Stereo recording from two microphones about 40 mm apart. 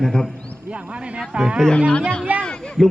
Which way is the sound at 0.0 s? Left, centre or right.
Centre.